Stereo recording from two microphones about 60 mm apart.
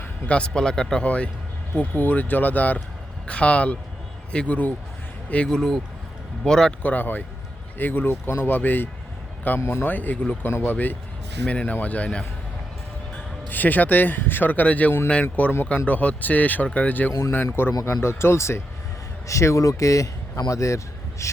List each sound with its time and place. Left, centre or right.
0.3 s speech: centre
6.8 s speech: left
9.6 s speech: left
9.8 s speech: left
17.3 s a man's voice: left